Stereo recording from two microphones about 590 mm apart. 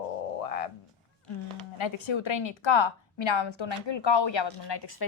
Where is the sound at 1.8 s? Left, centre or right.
Left.